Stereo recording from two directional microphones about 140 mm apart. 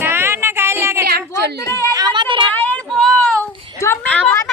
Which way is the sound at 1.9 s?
30° right (ahead or behind).